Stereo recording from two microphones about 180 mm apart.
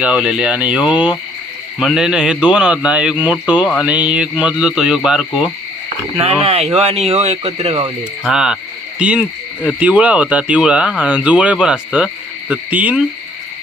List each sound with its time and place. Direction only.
0.0 s a man's voice: 5° right (ahead or behind)
6.1 s speech: 35° right (ahead or behind)
8.2 s a man's voice: 5° right (ahead or behind)
9.0 s cricket: 5° right (ahead or behind)
9.6 s speech: 5° right (ahead or behind)